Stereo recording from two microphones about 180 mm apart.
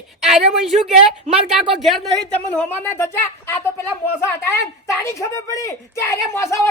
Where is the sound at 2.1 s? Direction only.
5° left (ahead or behind).